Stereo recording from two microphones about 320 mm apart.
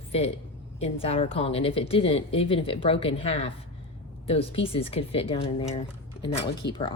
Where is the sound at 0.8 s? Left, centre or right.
Centre.